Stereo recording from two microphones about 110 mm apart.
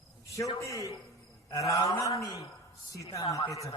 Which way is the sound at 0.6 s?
30° left (ahead or behind).